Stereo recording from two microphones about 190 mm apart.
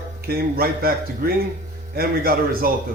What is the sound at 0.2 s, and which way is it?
Speech, 55° right (ahead or behind).